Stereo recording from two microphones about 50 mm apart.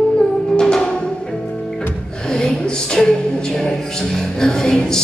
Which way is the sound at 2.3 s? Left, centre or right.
Centre.